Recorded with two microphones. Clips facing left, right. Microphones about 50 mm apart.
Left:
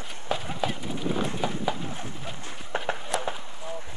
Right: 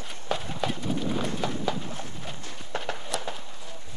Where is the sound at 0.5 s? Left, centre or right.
Centre.